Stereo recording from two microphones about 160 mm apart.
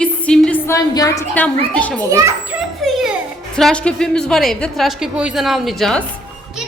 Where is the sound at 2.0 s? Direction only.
20° right (ahead or behind).